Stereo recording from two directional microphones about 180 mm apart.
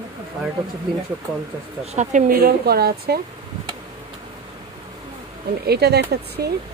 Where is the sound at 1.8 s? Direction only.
40° right (ahead or behind).